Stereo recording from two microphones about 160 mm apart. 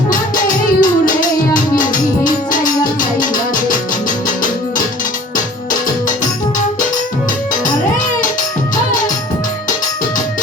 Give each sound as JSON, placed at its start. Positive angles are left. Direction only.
{"t": 0.1, "sound": "music", "side_deg": 60}